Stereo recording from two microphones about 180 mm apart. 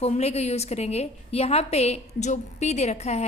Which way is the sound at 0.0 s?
35° left (ahead or behind).